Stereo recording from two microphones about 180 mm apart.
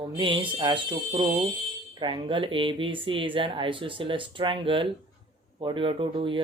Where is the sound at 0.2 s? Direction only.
30° right (ahead or behind).